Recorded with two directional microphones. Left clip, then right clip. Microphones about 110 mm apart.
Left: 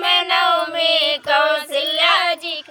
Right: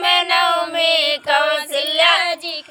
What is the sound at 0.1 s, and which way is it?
Child singing, 35° right (ahead or behind).